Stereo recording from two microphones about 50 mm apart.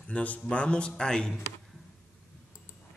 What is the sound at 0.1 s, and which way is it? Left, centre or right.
A man's voice, left.